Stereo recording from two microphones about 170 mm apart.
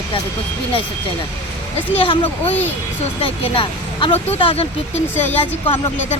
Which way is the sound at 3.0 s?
35° left (ahead or behind).